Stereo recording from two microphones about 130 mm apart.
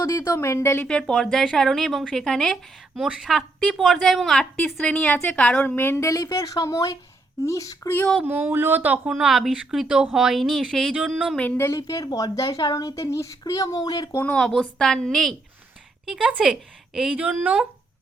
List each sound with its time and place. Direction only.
0.0 s a woman's voice: 25° left (ahead or behind)
0.9 s a woman's voice: 10° left (ahead or behind); by 7.9 s 25° left (ahead or behind)
8.2 s speech: 15° right (ahead or behind)
11.3 s a woman's voice: 15° left (ahead or behind)
14.2 s speech: 10° left (ahead or behind); by 17.7 s 10° right (ahead or behind)